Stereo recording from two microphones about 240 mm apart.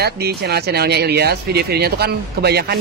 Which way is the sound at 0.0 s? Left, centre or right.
Right.